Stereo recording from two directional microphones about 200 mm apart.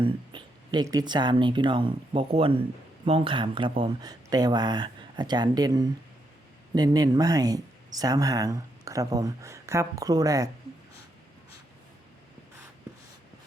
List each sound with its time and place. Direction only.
0.0 s speech: 20° right (ahead or behind)